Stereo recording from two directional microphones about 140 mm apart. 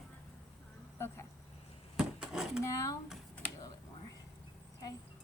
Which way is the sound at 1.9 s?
5° right (ahead or behind).